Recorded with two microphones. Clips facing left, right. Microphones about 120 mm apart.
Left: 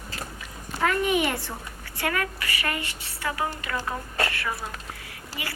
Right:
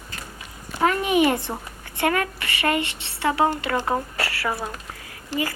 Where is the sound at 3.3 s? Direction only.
75° right (ahead or behind).